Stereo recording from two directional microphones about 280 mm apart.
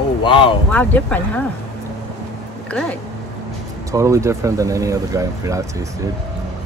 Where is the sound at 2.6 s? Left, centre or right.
Centre.